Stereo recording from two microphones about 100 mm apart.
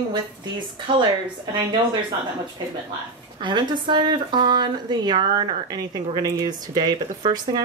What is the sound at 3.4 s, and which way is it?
Speech, 50° right (ahead or behind).